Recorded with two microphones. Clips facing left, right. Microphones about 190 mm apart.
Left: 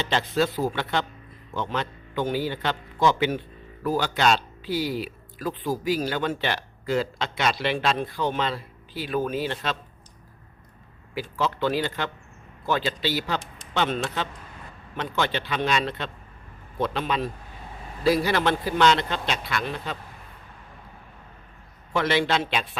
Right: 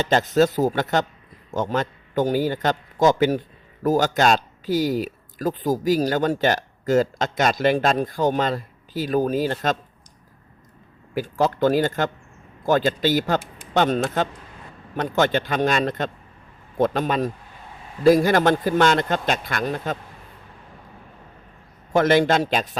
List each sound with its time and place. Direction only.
0.0 s a man's voice: 45° right (ahead or behind)
11.1 s speech: 45° right (ahead or behind)
21.9 s speech: 45° right (ahead or behind)